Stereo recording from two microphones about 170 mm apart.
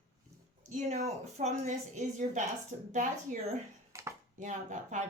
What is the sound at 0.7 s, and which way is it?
Speech, 45° right (ahead or behind).